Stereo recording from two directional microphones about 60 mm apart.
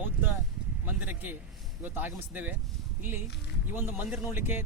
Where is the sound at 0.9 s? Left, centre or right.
Right.